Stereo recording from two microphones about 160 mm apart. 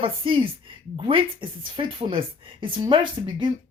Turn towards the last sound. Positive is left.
turn(degrees=-30)  # may be behind; listen again after turning